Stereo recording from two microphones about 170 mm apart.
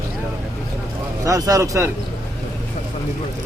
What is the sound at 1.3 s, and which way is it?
Speech, 20° right (ahead or behind).